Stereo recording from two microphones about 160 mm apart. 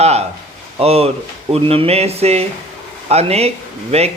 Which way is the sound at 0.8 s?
40° right (ahead or behind).